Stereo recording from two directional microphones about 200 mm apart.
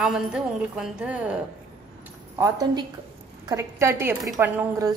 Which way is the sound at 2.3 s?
15° right (ahead or behind).